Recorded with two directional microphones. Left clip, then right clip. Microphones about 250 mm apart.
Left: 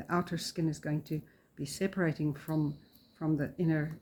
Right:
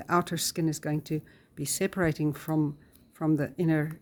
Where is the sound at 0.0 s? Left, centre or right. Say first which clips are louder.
Right 7 dB; right.